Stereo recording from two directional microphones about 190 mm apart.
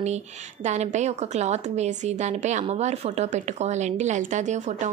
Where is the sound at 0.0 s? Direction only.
35° right (ahead or behind).